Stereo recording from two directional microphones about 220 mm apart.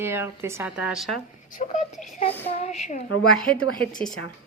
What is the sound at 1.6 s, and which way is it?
A woman's voice, 30° left (ahead or behind).